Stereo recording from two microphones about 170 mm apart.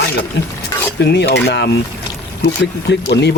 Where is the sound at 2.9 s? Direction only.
80° left.